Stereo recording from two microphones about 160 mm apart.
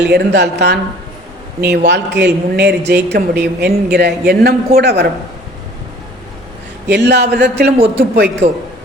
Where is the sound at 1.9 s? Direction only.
90° right.